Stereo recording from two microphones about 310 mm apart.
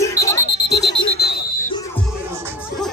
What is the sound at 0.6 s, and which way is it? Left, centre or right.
Alarm, left.